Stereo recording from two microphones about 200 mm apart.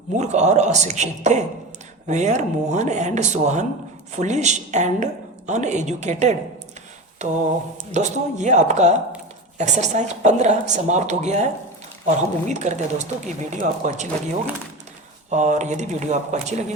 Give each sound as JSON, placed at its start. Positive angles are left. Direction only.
{"t": 0.2, "sound": "a woman's voice", "side_deg": -35}
{"t": 7.2, "sound": "a sound", "side_deg": -35}
{"t": 7.9, "sound": "a woman's voice", "side_deg": -35}
{"t": 15.3, "sound": "a woman's voice", "side_deg": -35}